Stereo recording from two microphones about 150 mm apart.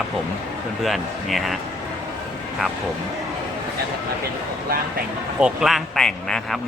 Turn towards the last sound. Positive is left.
turn(degrees=5)  # may be behind; listen again after turning